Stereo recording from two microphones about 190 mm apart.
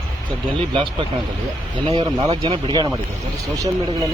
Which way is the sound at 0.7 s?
25° right (ahead or behind).